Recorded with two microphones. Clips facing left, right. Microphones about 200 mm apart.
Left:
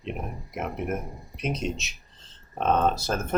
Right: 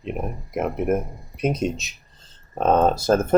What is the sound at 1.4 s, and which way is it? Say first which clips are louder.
Speech: right 7 dB; 50° right (ahead or behind).